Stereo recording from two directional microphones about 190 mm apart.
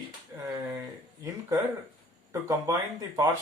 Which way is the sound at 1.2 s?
15° right (ahead or behind).